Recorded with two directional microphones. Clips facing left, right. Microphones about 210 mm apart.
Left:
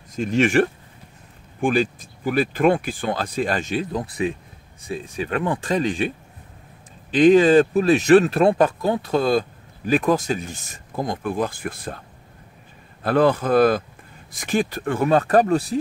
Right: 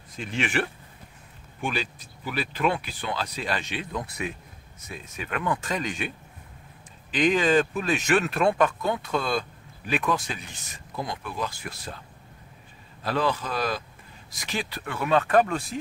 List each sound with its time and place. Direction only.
0.1 s speech: 45° left (ahead or behind)
7.2 s speech: 35° left (ahead or behind); by 12.0 s 50° left (ahead or behind)
13.0 s speech: 55° left (ahead or behind); by 15.8 s 40° left (ahead or behind)